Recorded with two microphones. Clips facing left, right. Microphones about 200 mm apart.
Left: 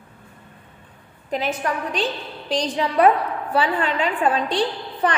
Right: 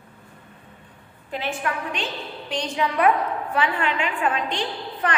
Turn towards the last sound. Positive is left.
turn(degrees=35)  # may be behind; listen again after turning